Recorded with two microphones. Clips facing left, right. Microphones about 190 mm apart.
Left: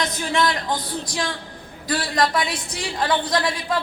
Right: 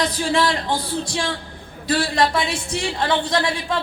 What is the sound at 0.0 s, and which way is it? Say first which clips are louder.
A woman's voice: right 2 dB; 30° right (ahead or behind).